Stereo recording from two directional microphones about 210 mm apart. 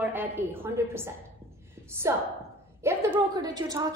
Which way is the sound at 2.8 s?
10° right (ahead or behind).